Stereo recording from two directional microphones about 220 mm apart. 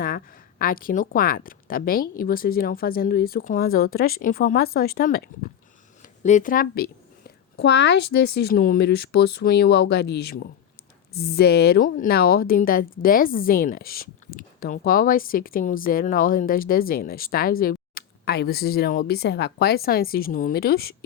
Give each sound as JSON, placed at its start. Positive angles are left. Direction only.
{"t": 0.6, "sound": "a woman's voice", "side_deg": 40}